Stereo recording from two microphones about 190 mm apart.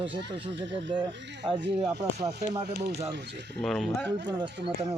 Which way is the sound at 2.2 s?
60° right (ahead or behind).